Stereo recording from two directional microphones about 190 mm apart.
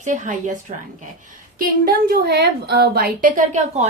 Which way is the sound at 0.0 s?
40° right (ahead or behind).